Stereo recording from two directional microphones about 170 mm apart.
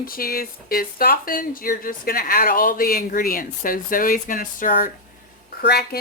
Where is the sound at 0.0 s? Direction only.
60° left (ahead or behind).